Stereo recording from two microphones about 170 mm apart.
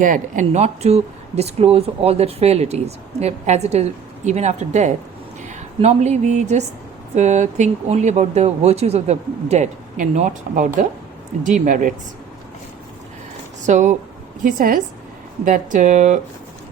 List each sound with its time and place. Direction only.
0.0 s a woman's voice: 50° right (ahead or behind)
13.7 s a woman's voice: 45° right (ahead or behind)